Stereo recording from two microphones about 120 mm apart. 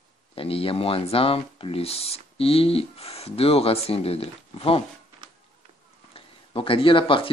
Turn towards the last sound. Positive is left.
turn(degrees=45)  # may be behind; listen again after turning